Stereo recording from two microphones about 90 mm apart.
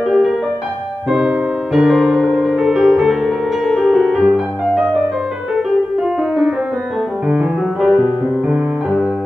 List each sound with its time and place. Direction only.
1.1 s music: 5° right (ahead or behind)
7.2 s music: 10° right (ahead or behind)